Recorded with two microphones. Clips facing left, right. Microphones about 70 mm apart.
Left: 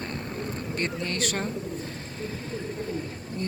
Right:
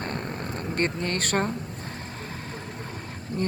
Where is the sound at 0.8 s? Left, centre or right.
Right.